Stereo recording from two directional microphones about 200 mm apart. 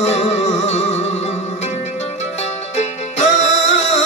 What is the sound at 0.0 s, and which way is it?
Music, 35° left (ahead or behind).